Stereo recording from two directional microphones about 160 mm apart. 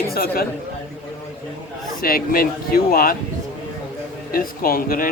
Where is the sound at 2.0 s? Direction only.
65° left (ahead or behind).